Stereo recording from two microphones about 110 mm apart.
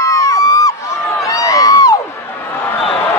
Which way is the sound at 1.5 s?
30° left (ahead or behind).